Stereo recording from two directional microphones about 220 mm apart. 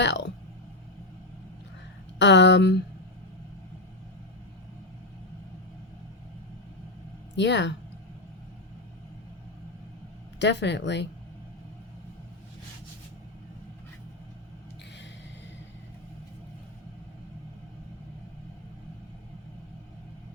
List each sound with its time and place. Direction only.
0.0 s speech: 50° left (ahead or behind)
2.1 s speech: 50° left (ahead or behind)
7.3 s speech: 50° left (ahead or behind)
10.4 s speech: 50° left (ahead or behind)